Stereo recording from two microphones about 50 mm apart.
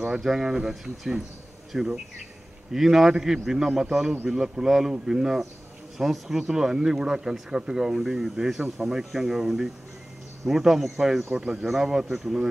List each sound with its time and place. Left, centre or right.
0.0 s speech: centre